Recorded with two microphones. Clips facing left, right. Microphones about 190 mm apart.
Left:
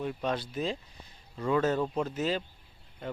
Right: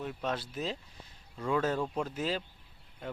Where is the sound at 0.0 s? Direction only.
Centre (ahead or behind).